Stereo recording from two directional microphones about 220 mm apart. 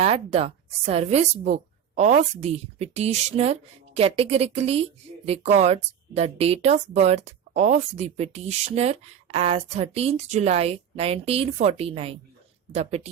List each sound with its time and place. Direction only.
0.0 s a woman's voice: 25° right (ahead or behind)